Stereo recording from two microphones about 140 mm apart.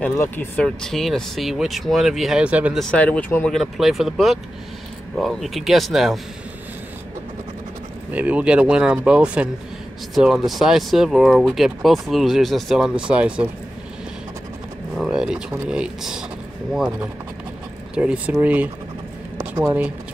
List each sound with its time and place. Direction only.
0.0 s speech: 15° left (ahead or behind); by 2.8 s 10° right (ahead or behind)
2.8 s speech: 10° left (ahead or behind)
3.5 s speech: centre (ahead or behind)
8.1 s speech: 10° right (ahead or behind)
15.0 s speech: 5° right (ahead or behind)
17.9 s speech: 10° right (ahead or behind)
19.3 s a sound: 25° right (ahead or behind)